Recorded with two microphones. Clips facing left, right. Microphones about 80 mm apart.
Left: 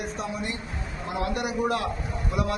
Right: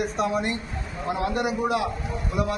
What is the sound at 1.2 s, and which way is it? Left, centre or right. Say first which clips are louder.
Speech: right 1 dB; right.